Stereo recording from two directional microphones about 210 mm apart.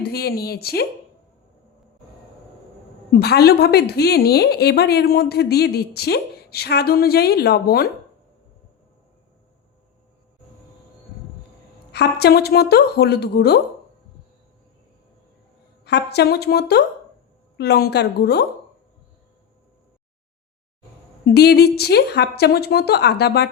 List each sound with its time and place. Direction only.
0.0 s a woman's voice: 45° left (ahead or behind)
3.1 s a woman's voice: 50° left (ahead or behind)
11.9 s a woman's voice: 50° left (ahead or behind)
15.8 s a woman's voice: 55° left (ahead or behind)
21.2 s a woman's voice: 50° left (ahead or behind)